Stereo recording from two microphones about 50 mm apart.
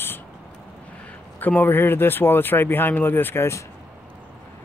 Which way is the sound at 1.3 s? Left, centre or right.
Left.